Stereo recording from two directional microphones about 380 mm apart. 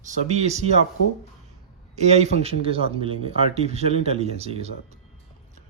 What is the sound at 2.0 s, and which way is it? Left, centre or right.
Speech, centre.